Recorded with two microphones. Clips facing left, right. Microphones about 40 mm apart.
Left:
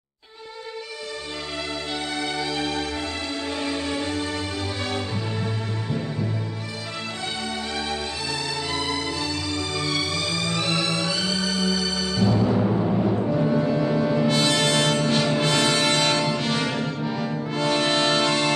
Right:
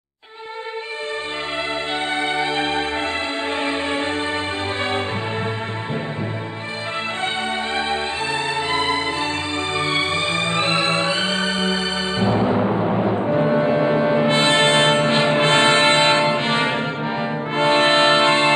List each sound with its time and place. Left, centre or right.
2.1 s music: right
8.7 s music: right